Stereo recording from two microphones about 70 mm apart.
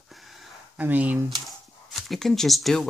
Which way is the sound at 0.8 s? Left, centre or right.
Right.